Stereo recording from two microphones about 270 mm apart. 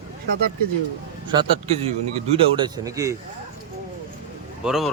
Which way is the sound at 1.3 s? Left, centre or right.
Centre.